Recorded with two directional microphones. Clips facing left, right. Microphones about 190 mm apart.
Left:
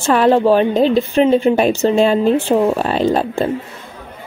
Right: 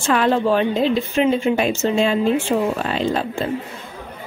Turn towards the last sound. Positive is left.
turn(degrees=40)  # may be behind; listen again after turning